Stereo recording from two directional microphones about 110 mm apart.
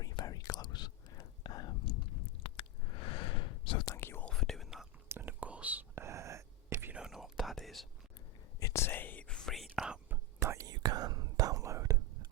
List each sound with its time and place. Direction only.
0.0 s whispering: 35° left (ahead or behind)
2.4 s whispering: 50° left (ahead or behind)
3.9 s whispering: 20° left (ahead or behind)
4.3 s whispering: 5° left (ahead or behind)
5.0 s whispering: 20° right (ahead or behind)
6.9 s whispering: 5° right (ahead or behind)
8.5 s whispering: 25° left (ahead or behind); by 10.0 s 5° right (ahead or behind)
10.1 s whispering: 25° right (ahead or behind)